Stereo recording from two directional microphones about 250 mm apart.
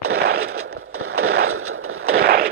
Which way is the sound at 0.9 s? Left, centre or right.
Right.